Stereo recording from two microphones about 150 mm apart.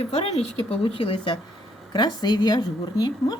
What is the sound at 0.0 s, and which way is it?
A woman's voice, 45° left (ahead or behind).